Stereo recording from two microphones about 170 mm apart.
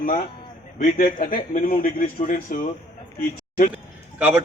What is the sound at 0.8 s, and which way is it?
A man's voice, 50° left (ahead or behind).